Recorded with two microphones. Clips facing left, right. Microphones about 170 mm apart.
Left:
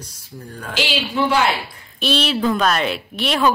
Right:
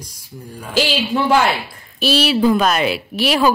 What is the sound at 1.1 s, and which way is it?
Speech, 50° right (ahead or behind).